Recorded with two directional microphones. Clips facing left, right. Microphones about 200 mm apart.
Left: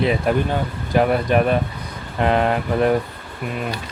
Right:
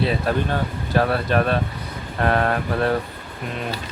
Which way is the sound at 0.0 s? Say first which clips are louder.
Left 3 dB; 15° left (ahead or behind).